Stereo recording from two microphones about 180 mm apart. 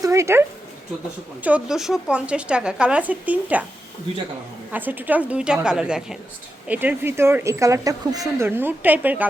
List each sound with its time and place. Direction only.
0.0 s speech: 15° right (ahead or behind)
4.7 s speech: 10° right (ahead or behind)